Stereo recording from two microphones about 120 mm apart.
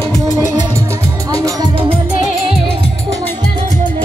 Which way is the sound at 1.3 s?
30° right (ahead or behind).